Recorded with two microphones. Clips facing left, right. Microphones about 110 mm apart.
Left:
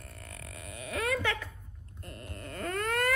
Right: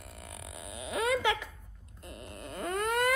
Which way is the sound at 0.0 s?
15° right (ahead or behind).